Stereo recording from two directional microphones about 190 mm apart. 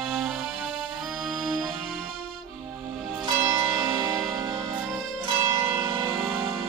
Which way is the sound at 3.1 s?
15° right (ahead or behind).